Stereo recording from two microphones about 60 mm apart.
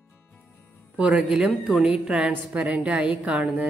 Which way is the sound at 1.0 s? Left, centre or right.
Centre.